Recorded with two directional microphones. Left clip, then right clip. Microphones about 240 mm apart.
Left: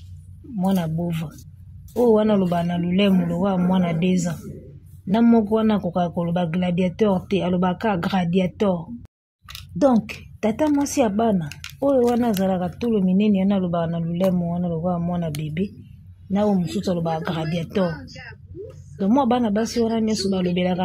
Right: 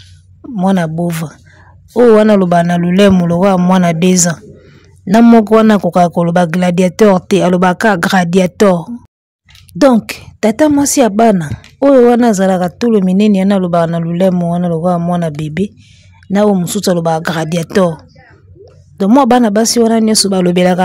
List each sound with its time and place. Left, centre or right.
0.6 s speech: right
18.9 s speech: right